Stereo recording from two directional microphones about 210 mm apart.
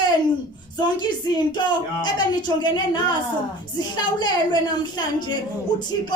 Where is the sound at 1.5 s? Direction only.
20° left (ahead or behind).